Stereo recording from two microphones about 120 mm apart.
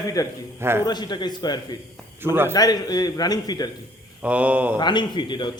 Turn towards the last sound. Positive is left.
turn(degrees=40)  # may be behind; listen again after turning